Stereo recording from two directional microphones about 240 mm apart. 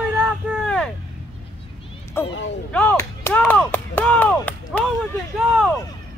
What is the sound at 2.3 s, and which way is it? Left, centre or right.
Speech, left.